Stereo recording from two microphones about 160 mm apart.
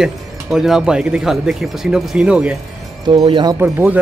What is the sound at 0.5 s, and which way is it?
Speech, 5° right (ahead or behind).